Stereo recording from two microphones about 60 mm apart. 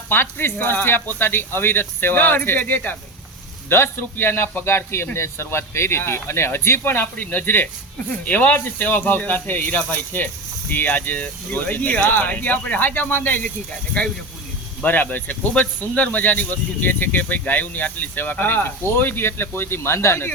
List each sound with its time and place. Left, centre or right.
0.1 s speech: left
3.7 s speech: left